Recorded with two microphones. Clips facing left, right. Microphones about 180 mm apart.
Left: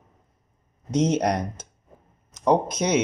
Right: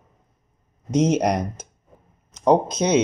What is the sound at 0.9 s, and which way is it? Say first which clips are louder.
Speech: right 3 dB; 10° right (ahead or behind).